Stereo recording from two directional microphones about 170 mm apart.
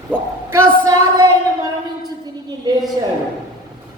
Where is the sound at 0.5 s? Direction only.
20° right (ahead or behind).